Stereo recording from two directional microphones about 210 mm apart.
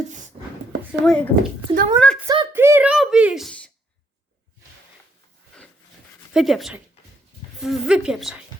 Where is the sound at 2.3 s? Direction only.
15° right (ahead or behind).